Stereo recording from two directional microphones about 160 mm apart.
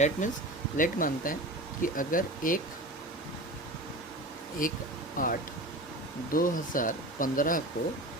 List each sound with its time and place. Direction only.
0.2 s speech: 50° left (ahead or behind)
4.6 s speech: 55° left (ahead or behind)